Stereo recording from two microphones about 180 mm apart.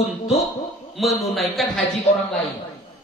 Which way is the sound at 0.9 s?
Centre (ahead or behind).